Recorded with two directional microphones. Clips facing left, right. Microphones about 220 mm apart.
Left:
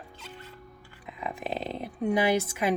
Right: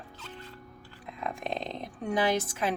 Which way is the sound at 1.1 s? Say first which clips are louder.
Left 1 dB; 5° left (ahead or behind).